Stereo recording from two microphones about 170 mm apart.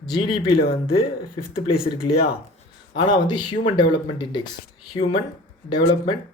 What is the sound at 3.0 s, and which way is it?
Speech, 25° left (ahead or behind).